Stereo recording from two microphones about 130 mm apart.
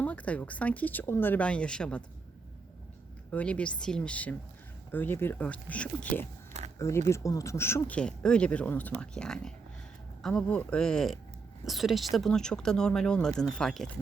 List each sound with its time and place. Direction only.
0.0 s speech: 10° left (ahead or behind)
3.3 s speech: 10° left (ahead or behind)
6.7 s speech: 20° left (ahead or behind)
7.9 s speech: 5° left (ahead or behind)